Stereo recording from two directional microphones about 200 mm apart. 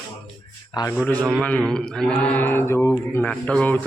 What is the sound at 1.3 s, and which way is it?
A man's voice, 5° left (ahead or behind).